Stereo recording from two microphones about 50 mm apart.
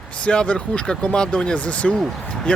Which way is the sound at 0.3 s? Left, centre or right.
Left.